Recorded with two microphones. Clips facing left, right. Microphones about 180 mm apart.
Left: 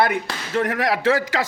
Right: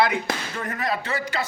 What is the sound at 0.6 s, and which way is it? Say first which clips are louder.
Speech: left 11 dB; 90° left.